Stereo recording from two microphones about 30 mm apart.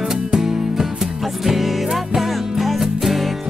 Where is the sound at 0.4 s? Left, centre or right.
Centre.